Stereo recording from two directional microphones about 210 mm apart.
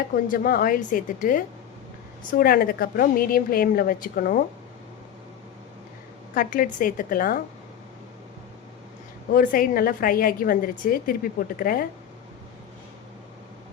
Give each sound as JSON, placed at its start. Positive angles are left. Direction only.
{"t": 0.3, "sound": "a woman's voice", "side_deg": 45}
{"t": 6.3, "sound": "a woman's voice", "side_deg": 40}
{"t": 9.3, "sound": "a woman's voice", "side_deg": 40}